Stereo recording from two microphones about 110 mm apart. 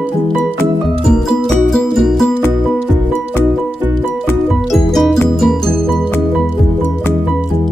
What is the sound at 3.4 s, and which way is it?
Music, 20° right (ahead or behind).